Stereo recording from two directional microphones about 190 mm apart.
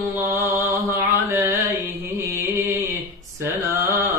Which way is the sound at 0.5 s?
15° right (ahead or behind).